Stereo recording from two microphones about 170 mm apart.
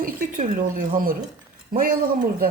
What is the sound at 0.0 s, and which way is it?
Speech, 50° right (ahead or behind).